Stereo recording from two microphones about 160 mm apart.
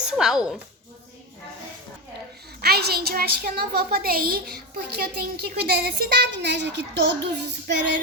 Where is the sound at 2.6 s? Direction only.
80° right.